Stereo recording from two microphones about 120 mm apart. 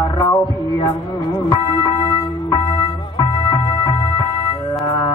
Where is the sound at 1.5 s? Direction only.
35° left (ahead or behind).